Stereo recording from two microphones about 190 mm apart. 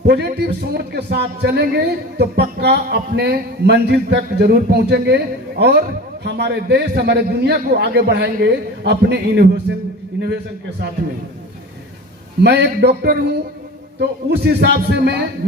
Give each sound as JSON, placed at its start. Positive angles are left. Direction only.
{"t": 0.0, "sound": "a man's voice", "side_deg": -60}
{"t": 12.4, "sound": "a man's voice", "side_deg": -60}